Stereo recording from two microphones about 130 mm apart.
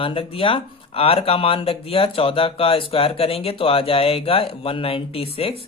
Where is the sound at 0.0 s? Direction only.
45° left (ahead or behind).